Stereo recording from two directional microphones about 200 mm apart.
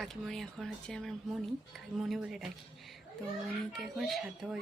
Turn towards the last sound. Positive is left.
turn(degrees=0)  # may be behind; listen again after turning